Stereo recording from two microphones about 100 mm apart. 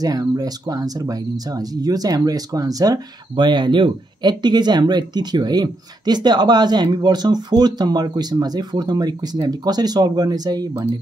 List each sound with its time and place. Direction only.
0.0 s speech: 40° right (ahead or behind)